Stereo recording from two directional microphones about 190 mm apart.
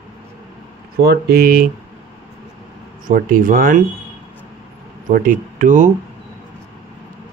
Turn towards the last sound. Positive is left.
turn(degrees=-40)  # may be behind; listen again after turning